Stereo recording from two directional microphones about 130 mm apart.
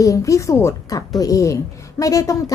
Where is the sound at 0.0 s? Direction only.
25° left (ahead or behind).